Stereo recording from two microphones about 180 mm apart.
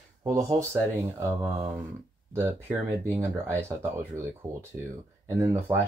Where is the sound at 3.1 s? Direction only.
15° right (ahead or behind).